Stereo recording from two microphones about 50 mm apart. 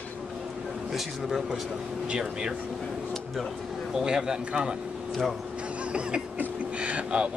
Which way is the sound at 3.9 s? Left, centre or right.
Centre.